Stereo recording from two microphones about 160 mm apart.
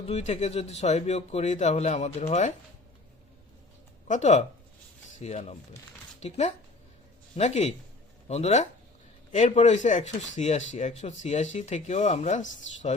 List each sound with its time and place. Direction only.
0.1 s speech: 45° left (ahead or behind)
4.1 s speech: 50° left (ahead or behind)